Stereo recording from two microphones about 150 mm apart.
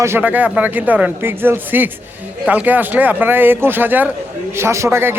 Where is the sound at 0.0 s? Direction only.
15° right (ahead or behind).